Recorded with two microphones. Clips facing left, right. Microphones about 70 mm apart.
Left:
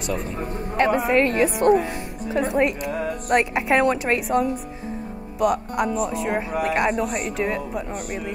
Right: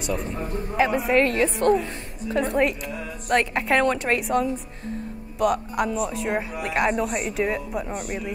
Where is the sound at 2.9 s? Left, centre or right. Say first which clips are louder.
Left 7 dB; left.